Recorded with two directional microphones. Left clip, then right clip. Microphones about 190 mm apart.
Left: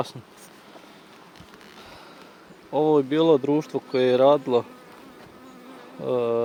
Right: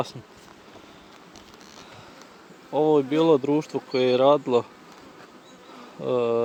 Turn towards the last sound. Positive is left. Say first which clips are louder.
# even
turn(degrees=-10)  # may be behind; listen again after turning